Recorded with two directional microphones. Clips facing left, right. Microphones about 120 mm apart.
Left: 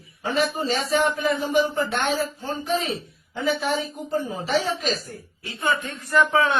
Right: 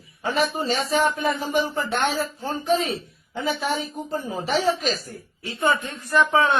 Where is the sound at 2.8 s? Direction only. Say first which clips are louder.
Right 2 dB; 30° right (ahead or behind).